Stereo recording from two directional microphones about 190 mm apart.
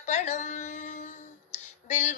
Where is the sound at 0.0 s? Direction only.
40° left (ahead or behind).